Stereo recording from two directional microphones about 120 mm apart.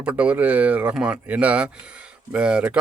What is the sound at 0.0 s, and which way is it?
Speech, 10° right (ahead or behind).